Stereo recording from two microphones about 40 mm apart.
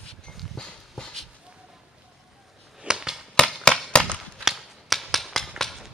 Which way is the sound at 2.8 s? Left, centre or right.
Centre.